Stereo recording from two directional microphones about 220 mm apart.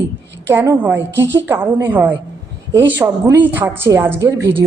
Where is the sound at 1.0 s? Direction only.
55° right (ahead or behind).